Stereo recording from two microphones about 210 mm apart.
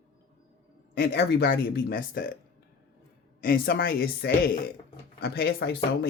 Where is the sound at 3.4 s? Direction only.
45° left (ahead or behind).